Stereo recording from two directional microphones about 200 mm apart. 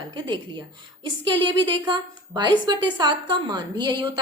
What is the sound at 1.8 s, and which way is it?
A woman's voice, 20° right (ahead or behind).